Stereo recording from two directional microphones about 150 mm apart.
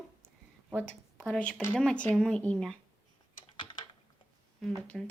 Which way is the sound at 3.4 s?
35° left (ahead or behind).